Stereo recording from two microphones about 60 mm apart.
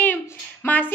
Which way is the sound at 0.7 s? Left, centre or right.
Left.